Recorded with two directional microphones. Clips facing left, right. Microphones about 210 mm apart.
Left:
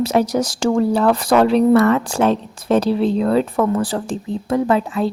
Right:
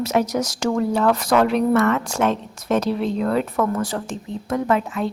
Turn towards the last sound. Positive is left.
turn(degrees=35)  # may be behind; listen again after turning